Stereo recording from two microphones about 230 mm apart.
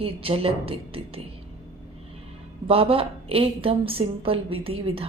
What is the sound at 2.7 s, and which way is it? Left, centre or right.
A woman's voice, right.